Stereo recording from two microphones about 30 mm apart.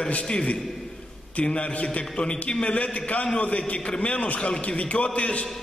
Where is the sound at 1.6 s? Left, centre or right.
Left.